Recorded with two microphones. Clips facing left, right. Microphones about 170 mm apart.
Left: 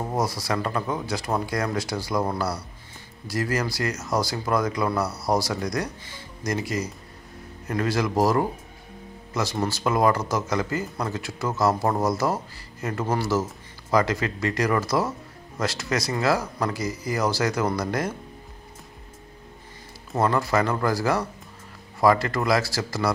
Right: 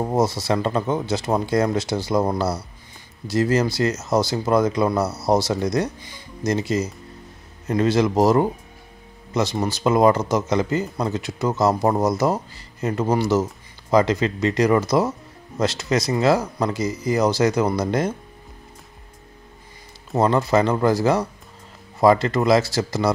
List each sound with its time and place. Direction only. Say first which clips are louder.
0.0 s speech: right 6 dB; 25° right (ahead or behind)
20.1 s speech: right 4 dB; 20° right (ahead or behind)